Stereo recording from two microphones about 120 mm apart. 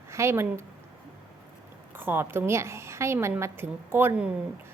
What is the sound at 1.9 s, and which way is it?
A woman's voice, 20° right (ahead or behind).